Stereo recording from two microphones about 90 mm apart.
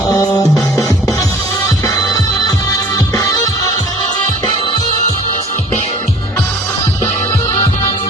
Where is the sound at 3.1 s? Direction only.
45° left (ahead or behind).